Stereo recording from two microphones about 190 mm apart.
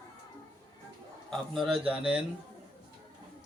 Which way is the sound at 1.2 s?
Centre (ahead or behind).